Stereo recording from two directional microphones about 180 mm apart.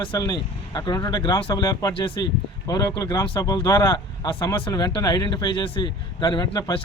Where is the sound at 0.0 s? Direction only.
25° left (ahead or behind).